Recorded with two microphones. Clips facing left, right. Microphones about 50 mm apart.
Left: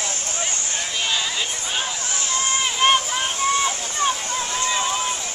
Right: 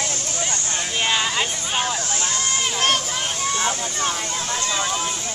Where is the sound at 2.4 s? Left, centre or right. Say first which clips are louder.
Left 4 dB; left.